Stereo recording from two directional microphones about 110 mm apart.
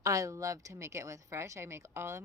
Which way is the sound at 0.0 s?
30° right (ahead or behind).